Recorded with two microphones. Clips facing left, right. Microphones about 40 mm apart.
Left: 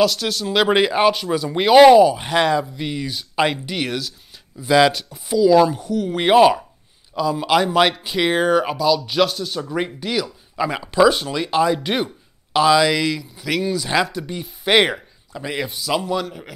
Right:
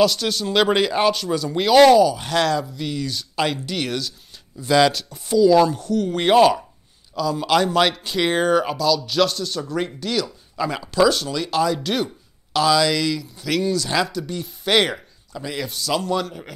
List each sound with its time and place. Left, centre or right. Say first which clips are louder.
0.0 s speech: even; centre; by 15.8 s left
15.8 s speech: right 1 dB; centre